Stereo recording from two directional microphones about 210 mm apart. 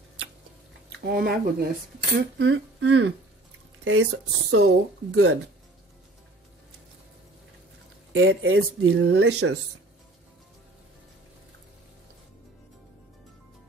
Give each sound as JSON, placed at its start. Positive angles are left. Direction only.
{"t": 1.0, "sound": "speech", "side_deg": -50}
{"t": 2.3, "sound": "speech", "side_deg": -60}
{"t": 4.6, "sound": "speech", "side_deg": -90}
{"t": 8.1, "sound": "speech", "side_deg": -65}
{"t": 8.8, "sound": "speech", "side_deg": -55}